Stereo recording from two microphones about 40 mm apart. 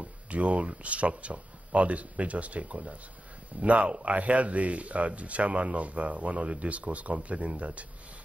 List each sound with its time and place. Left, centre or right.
0.0 s speech: right